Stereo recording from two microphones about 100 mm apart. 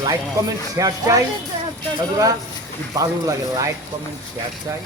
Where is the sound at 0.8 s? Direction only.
35° right (ahead or behind).